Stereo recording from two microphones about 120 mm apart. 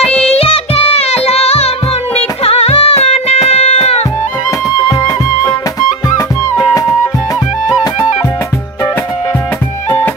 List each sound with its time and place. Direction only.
0.0 s music: 5° left (ahead or behind)
0.3 s music: 55° left (ahead or behind)
5.8 s music: 30° left (ahead or behind)